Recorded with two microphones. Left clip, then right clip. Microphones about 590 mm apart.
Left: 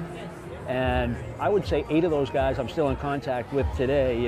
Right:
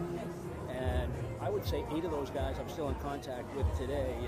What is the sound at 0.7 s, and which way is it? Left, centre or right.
Speech, left.